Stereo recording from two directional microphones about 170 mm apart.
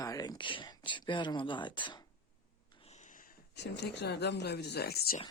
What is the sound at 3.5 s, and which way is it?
Speech, 85° left.